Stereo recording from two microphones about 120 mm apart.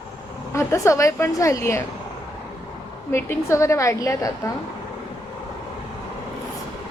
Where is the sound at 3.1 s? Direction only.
20° left (ahead or behind).